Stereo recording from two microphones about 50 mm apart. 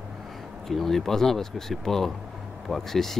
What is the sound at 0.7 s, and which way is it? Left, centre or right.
Speech, centre.